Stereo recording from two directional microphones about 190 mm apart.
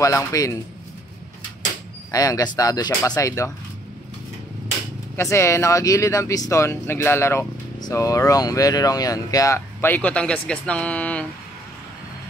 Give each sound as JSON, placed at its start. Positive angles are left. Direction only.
{"t": 0.0, "sound": "speech", "side_deg": 15}
{"t": 2.0, "sound": "speech", "side_deg": 20}
{"t": 5.1, "sound": "speech", "side_deg": 15}